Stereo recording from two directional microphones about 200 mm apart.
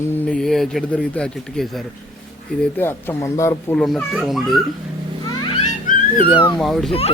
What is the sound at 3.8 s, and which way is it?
Speech, centre (ahead or behind).